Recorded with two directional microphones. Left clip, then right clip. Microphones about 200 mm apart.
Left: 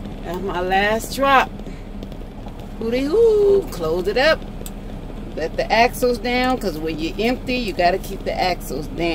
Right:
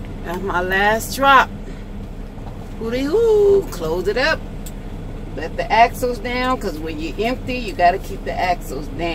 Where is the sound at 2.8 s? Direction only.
10° left (ahead or behind).